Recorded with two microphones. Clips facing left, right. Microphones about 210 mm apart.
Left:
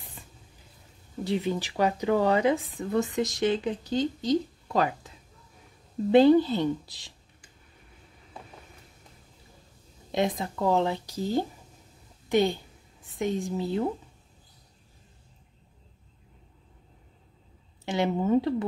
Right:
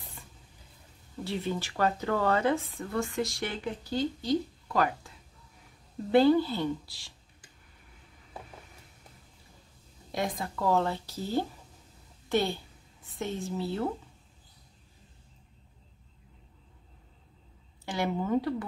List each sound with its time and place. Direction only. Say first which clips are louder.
1.2 s speech: left 5 dB; 15° left (ahead or behind)
6.1 s speech: left 4 dB; 20° left (ahead or behind)
10.1 s a woman's voice: left 5 dB; 20° left (ahead or behind)
17.8 s speech: left 5 dB; 20° left (ahead or behind)